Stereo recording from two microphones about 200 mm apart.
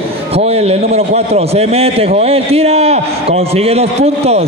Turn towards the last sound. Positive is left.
turn(degrees=-30)  # may be behind; listen again after turning